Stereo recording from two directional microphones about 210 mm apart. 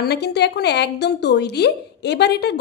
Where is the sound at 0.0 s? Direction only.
50° left (ahead or behind).